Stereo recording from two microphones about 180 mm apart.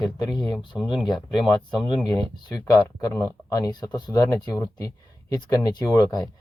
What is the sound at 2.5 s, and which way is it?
Speech, 20° left (ahead or behind).